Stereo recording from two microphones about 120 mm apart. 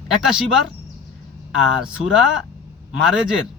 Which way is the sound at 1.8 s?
5° right (ahead or behind).